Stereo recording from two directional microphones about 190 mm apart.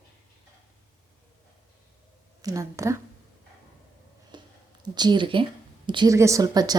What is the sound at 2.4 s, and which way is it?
Speech, 20° right (ahead or behind).